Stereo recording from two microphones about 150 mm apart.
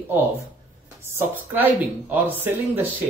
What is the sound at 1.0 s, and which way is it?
Speech, 10° right (ahead or behind).